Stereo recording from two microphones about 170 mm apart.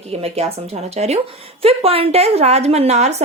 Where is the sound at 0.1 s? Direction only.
35° right (ahead or behind).